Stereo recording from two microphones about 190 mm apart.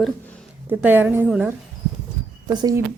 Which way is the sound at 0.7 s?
10° right (ahead or behind).